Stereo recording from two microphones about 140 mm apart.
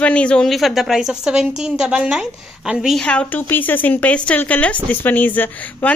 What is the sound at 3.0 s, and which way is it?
Speech, 10° left (ahead or behind).